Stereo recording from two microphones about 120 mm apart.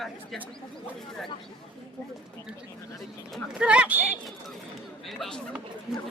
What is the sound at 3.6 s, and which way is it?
Speech, 10° right (ahead or behind).